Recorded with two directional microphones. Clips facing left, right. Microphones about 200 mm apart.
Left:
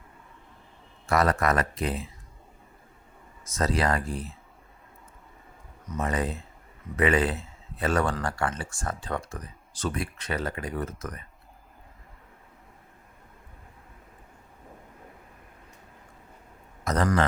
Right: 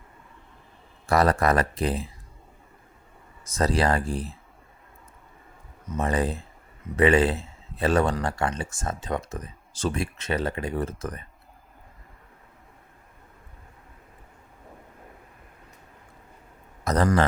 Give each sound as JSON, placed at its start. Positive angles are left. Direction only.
{"t": 1.0, "sound": "speech", "side_deg": -35}
{"t": 3.4, "sound": "speech", "side_deg": -30}
{"t": 5.9, "sound": "a man's voice", "side_deg": -30}
{"t": 16.8, "sound": "speech", "side_deg": -35}